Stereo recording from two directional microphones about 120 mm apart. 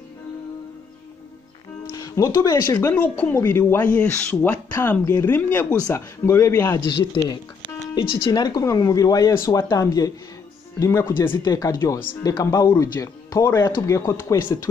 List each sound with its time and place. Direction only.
2.0 s speech: 30° left (ahead or behind)
7.8 s speech: 40° left (ahead or behind)